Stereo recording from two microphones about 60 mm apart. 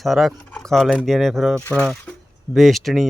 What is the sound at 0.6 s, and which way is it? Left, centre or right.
Speech, centre.